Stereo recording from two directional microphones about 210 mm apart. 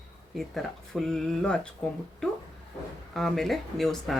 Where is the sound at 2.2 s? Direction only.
5° left (ahead or behind).